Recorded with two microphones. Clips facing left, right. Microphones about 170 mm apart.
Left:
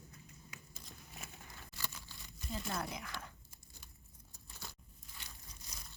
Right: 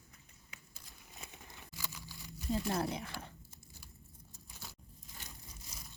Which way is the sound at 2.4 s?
35° right (ahead or behind).